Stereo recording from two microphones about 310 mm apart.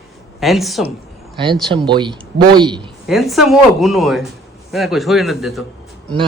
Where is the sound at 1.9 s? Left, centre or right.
Centre.